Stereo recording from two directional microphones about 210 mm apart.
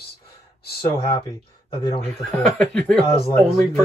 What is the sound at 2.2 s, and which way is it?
Speech, 5° left (ahead or behind).